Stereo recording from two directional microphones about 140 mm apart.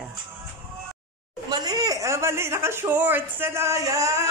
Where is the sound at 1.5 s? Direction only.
30° right (ahead or behind).